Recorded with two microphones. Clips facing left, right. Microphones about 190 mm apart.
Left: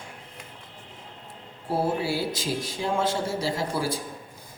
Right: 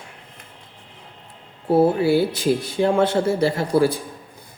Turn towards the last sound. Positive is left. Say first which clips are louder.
# right 9 dB
turn(degrees=-60)  # may be behind; listen again after turning